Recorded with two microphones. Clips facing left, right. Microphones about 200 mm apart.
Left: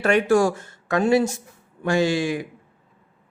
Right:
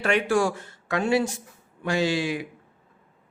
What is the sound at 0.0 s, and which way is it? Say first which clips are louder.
Speech: left 5 dB; 45° left (ahead or behind).